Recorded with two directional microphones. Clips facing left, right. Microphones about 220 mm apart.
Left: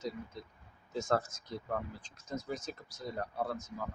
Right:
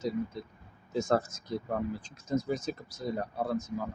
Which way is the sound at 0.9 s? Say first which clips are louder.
Right 4 dB; 10° right (ahead or behind).